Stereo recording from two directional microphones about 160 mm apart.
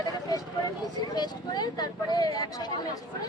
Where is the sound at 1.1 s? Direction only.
25° left (ahead or behind).